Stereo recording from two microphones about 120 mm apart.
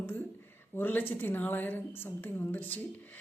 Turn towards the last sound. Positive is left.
turn(degrees=15)  # may be behind; listen again after turning